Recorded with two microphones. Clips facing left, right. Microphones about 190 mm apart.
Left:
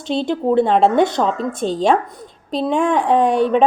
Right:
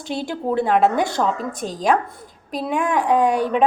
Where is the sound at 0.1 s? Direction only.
25° left (ahead or behind).